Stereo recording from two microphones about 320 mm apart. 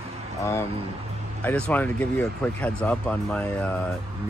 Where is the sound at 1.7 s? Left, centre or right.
Centre.